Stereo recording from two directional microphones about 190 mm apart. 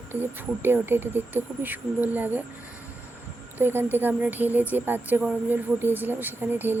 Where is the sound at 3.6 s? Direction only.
10° right (ahead or behind).